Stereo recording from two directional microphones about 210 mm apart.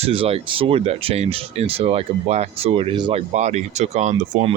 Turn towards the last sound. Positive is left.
turn(degrees=-35)  # may be behind; listen again after turning